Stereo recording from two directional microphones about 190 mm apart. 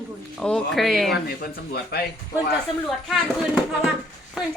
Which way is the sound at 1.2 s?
55° left (ahead or behind).